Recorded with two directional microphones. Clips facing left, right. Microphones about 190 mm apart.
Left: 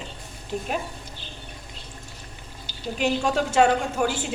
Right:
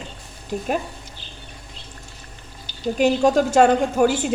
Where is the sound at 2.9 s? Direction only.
40° right (ahead or behind).